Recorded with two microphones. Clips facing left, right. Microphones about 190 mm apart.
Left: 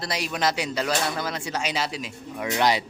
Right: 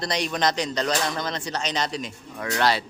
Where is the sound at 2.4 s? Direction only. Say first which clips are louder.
Left 1 dB; 15° left (ahead or behind).